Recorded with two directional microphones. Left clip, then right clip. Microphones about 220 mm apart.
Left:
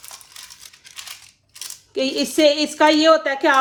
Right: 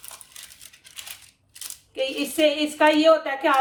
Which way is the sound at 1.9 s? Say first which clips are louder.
Left 5 dB; 45° left (ahead or behind).